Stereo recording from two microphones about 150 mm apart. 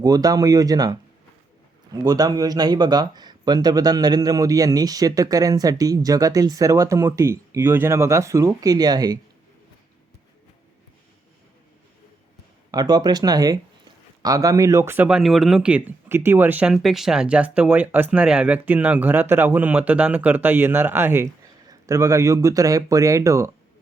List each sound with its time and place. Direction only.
0.0 s speech: 25° right (ahead or behind)
12.7 s speech: 25° right (ahead or behind)